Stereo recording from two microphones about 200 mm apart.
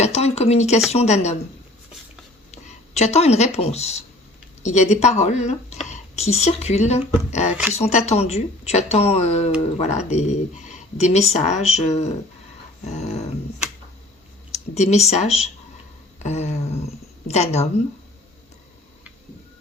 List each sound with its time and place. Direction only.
0.0 s a sound: 35° left (ahead or behind)
0.9 s speech: 35° left (ahead or behind)
2.5 s speech: 35° left (ahead or behind)
14.5 s a woman's voice: 35° left (ahead or behind)